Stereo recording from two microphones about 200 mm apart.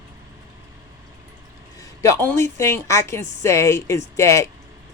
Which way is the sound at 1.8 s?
15° left (ahead or behind).